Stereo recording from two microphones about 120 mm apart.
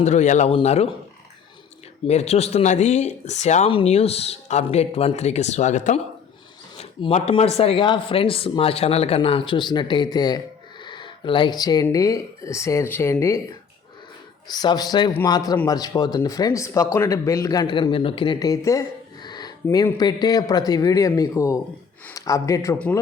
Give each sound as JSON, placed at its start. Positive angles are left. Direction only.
{"t": 0.0, "sound": "speech", "side_deg": 75}
{"t": 0.5, "sound": "speech", "side_deg": 60}
{"t": 2.0, "sound": "speech", "side_deg": 65}
{"t": 3.7, "sound": "speech", "side_deg": 50}
{"t": 7.1, "sound": "speech", "side_deg": 55}
{"t": 14.5, "sound": "speech", "side_deg": 35}
{"t": 18.4, "sound": "a sound", "side_deg": 30}
{"t": 19.7, "sound": "speech", "side_deg": 35}